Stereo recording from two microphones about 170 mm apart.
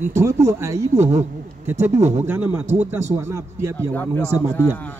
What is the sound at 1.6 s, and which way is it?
Speech, 15° right (ahead or behind).